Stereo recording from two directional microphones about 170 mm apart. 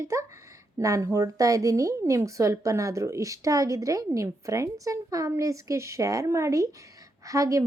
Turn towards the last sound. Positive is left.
turn(degrees=-20)  # may be behind; listen again after turning